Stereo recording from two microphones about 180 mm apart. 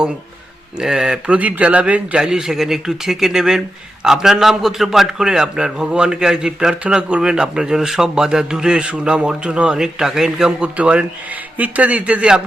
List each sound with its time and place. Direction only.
0.8 s a man's voice: 5° right (ahead or behind)